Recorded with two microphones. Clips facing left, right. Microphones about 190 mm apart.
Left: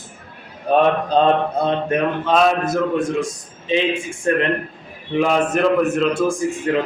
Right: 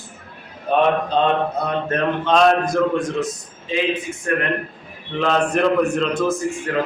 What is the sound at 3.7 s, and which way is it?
Speech, 25° left (ahead or behind).